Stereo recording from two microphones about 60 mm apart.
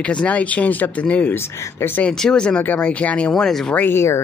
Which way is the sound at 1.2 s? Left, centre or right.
Left.